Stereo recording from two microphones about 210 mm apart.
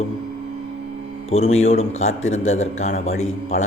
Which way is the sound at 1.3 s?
30° left (ahead or behind).